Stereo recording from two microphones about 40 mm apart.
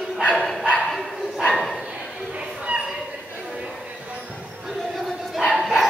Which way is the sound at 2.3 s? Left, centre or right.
Right.